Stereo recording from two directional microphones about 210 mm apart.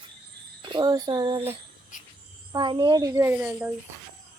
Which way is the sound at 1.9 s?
40° left (ahead or behind).